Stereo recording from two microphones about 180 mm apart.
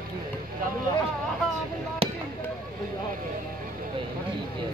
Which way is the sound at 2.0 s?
35° right (ahead or behind).